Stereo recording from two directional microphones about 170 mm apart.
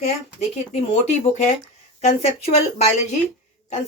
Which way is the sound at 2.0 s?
40° left (ahead or behind).